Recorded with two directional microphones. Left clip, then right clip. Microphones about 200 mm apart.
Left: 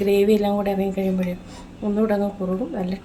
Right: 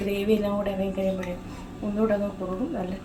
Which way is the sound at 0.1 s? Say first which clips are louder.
Left 7 dB; 50° left (ahead or behind).